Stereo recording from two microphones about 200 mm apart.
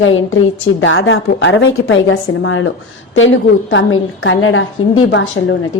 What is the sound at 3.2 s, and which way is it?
A woman's voice, 70° left (ahead or behind).